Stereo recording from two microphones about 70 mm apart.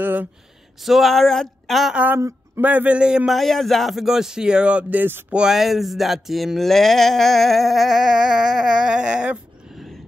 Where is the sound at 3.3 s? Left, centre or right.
Centre; by 5.3 s right.